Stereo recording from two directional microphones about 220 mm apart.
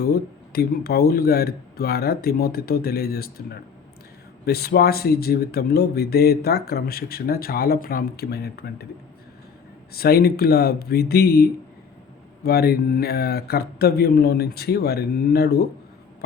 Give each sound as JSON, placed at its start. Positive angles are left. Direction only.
{"t": 0.0, "sound": "speech", "side_deg": 45}
{"t": 9.9, "sound": "speech", "side_deg": 45}